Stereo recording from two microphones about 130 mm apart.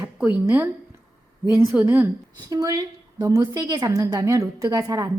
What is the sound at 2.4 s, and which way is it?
A woman's voice, 30° right (ahead or behind).